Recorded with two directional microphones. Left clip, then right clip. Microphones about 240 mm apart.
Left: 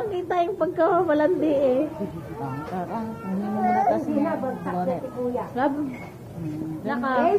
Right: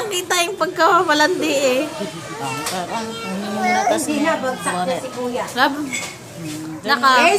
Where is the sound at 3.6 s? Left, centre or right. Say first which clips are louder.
Right 4 dB; right.